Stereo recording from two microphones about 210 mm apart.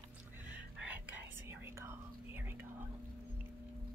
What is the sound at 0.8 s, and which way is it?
Whispering, 10° right (ahead or behind).